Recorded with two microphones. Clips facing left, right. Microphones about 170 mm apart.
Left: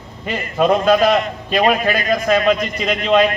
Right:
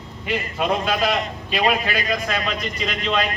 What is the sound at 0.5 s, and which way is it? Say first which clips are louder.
A man's voice: left 10 dB; 45° left (ahead or behind).